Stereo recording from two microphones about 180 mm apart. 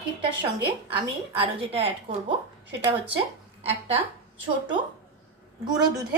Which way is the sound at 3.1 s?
35° right (ahead or behind).